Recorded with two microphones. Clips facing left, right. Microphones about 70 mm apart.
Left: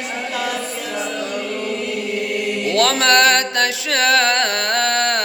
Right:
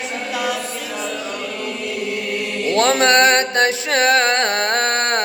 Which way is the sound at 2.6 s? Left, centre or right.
Right.